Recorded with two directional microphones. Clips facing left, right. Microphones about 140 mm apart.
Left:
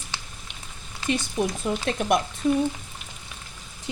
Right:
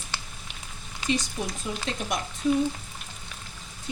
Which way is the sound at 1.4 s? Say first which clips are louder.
Left 7 dB; 60° left (ahead or behind).